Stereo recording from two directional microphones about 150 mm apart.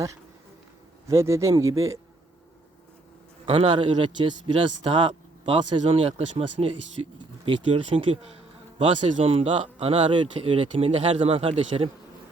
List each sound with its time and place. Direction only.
1.0 s speech: 20° right (ahead or behind)
3.4 s a man's voice: 40° right (ahead or behind)